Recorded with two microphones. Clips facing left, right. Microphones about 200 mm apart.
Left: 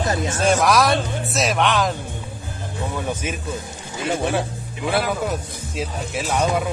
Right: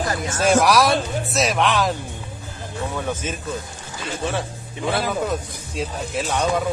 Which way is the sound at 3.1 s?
10° left (ahead or behind).